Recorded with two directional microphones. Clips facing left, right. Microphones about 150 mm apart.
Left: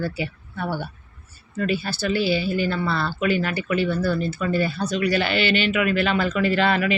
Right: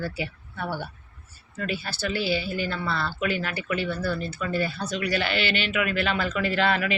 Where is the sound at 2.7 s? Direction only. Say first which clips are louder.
Left 5 dB; 40° left (ahead or behind).